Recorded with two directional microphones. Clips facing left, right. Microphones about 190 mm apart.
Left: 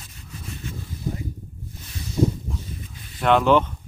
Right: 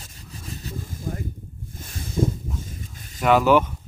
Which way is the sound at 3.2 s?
5° right (ahead or behind).